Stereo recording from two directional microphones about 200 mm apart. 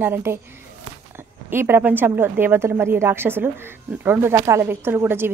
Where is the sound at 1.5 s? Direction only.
10° right (ahead or behind).